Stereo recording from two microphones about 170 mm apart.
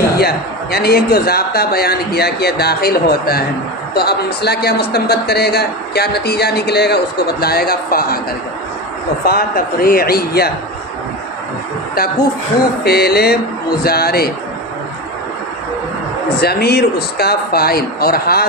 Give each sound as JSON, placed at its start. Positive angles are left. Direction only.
{"t": 0.2, "sound": "a man's voice", "side_deg": 65}
{"t": 9.2, "sound": "a man's voice", "side_deg": 60}
{"t": 11.9, "sound": "a man's voice", "side_deg": 60}
{"t": 16.3, "sound": "a man's voice", "side_deg": 65}